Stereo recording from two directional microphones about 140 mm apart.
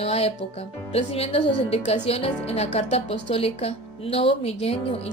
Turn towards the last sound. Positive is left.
turn(degrees=45)  # may be behind; listen again after turning